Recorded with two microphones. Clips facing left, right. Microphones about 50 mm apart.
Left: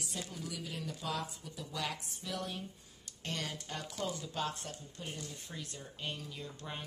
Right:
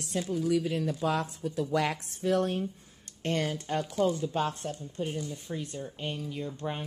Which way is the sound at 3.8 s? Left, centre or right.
Right.